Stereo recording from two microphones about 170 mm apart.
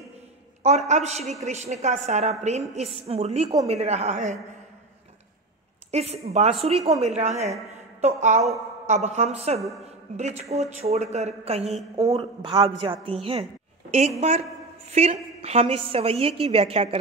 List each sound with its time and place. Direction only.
0.7 s speech: 40° right (ahead or behind)
5.9 s a woman's voice: 40° right (ahead or behind)
14.9 s speech: 40° right (ahead or behind)